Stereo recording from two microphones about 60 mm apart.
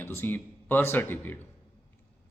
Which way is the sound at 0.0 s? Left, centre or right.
Left.